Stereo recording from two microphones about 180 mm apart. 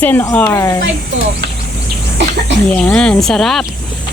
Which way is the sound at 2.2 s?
75° right (ahead or behind).